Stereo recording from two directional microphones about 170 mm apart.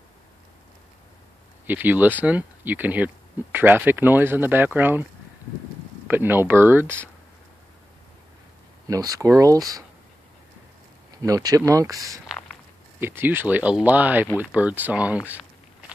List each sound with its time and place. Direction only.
1.7 s speech: 10° right (ahead or behind)
6.0 s speech: 10° right (ahead or behind)
8.8 s speech: 20° right (ahead or behind)
11.2 s speech: 20° right (ahead or behind)